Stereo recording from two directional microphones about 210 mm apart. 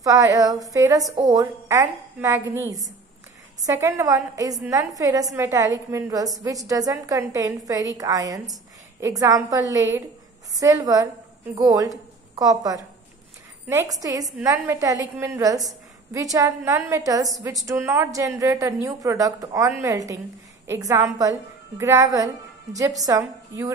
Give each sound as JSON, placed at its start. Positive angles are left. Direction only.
{"t": 0.0, "sound": "a woman's voice", "side_deg": -15}